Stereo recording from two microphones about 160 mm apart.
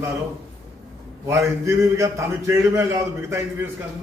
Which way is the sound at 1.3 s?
20° right (ahead or behind).